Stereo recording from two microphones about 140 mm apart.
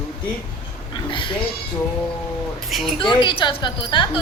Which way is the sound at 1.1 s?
35° left (ahead or behind).